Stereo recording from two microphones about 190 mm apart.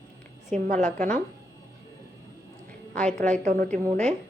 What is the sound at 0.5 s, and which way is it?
Speech, 40° right (ahead or behind).